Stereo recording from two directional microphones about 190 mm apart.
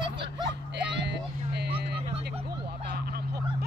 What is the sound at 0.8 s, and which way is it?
Vehicle, 60° right (ahead or behind).